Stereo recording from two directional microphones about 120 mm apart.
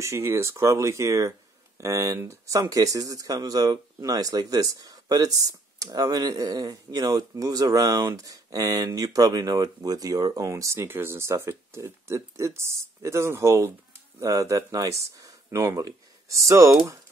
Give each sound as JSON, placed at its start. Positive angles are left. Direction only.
{"t": 0.0, "sound": "speech", "side_deg": -20}